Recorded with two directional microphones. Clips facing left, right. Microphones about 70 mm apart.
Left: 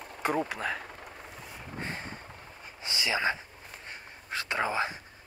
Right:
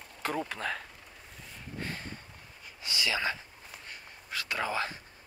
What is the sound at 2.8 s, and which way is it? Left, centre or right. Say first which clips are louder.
Speech: left 2 dB; left.